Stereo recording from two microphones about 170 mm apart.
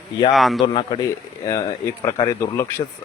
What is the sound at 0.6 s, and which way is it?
Speech, 30° left (ahead or behind).